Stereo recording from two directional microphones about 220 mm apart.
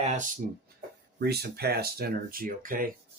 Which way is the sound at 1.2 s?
45° right (ahead or behind).